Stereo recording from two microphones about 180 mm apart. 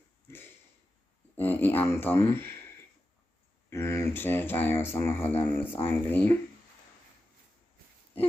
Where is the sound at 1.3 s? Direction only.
10° left (ahead or behind).